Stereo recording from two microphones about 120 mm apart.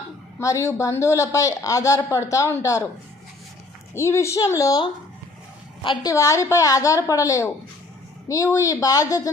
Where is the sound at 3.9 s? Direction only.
20° left (ahead or behind).